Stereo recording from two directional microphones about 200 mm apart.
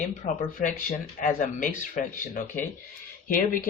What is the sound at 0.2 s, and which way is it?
A man's voice, 45° left (ahead or behind).